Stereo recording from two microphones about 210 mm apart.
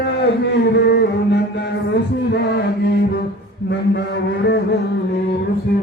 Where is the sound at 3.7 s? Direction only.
55° left (ahead or behind).